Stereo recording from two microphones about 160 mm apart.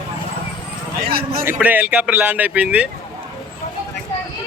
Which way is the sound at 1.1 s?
70° right (ahead or behind).